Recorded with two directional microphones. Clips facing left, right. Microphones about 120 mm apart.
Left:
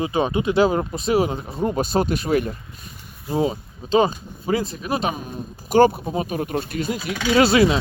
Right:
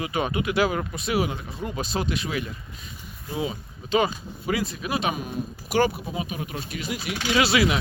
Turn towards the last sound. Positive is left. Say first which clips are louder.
# left 6 dB
turn(degrees=40)  # may be behind; listen again after turning